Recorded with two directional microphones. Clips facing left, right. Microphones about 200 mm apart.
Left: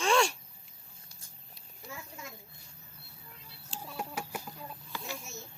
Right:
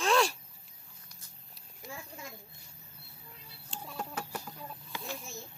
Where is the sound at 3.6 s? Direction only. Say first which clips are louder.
Left 1 dB; centre (ahead or behind).